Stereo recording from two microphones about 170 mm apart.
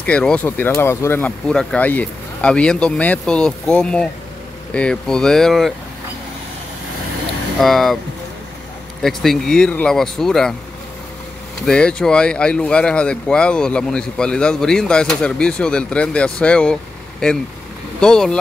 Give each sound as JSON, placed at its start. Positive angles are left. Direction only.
{"t": 0.0, "sound": "speech", "side_deg": 5}
{"t": 7.6, "sound": "speech", "side_deg": 0}
{"t": 9.0, "sound": "speech", "side_deg": 0}
{"t": 11.6, "sound": "speech", "side_deg": 5}
{"t": 18.0, "sound": "speech", "side_deg": 5}